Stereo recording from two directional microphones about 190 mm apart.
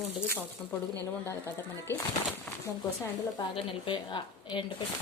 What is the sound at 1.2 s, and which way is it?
Speech, 15° left (ahead or behind).